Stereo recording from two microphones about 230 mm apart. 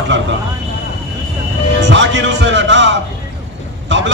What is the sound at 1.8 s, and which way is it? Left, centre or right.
A man's voice, right.